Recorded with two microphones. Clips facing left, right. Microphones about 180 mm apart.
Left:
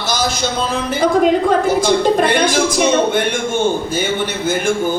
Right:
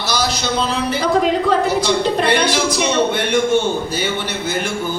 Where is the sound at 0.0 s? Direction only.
50° left (ahead or behind).